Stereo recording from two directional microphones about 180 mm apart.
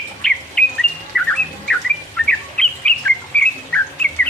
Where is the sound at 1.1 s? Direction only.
Centre (ahead or behind).